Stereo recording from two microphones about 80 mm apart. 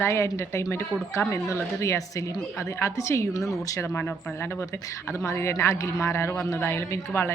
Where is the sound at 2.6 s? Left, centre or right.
Left.